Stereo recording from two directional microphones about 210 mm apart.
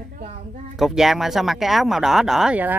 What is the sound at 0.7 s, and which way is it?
Speech, centre (ahead or behind).